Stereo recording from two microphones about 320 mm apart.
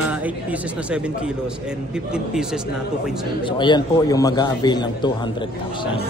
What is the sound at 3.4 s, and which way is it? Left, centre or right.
A man's voice, centre.